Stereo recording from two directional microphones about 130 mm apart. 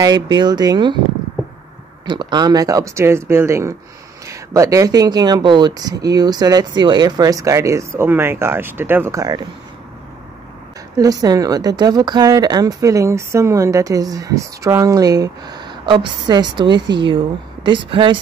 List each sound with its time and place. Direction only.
0.0 s speech: 35° right (ahead or behind)
2.0 s speech: 40° right (ahead or behind)
11.0 s speech: 25° right (ahead or behind)